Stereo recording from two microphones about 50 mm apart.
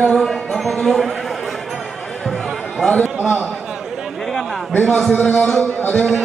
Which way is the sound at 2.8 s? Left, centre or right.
Left.